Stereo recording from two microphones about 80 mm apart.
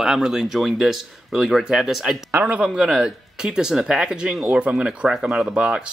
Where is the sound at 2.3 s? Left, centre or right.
Right.